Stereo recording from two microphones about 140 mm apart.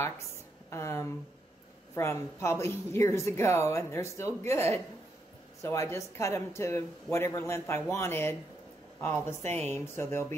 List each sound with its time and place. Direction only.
0.7 s a woman's voice: 20° left (ahead or behind)